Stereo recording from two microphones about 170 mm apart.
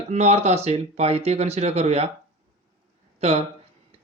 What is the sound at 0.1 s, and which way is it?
Speech, 40° right (ahead or behind).